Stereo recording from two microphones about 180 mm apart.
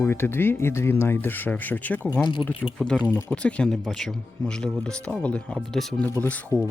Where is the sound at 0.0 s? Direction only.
10° left (ahead or behind).